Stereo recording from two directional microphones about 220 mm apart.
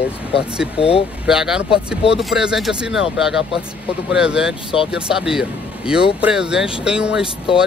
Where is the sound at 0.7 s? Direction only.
25° left (ahead or behind).